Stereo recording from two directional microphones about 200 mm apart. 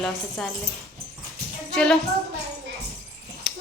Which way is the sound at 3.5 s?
Centre (ahead or behind).